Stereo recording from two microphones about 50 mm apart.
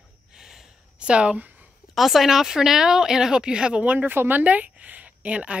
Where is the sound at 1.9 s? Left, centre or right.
Centre; by 5.5 s right.